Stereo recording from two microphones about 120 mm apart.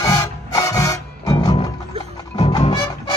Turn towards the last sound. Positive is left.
turn(degrees=35)  # may be behind; listen again after turning